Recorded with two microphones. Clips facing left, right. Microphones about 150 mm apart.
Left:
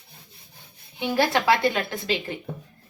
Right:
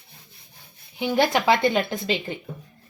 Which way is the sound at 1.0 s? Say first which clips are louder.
Right 1 dB; 20° right (ahead or behind).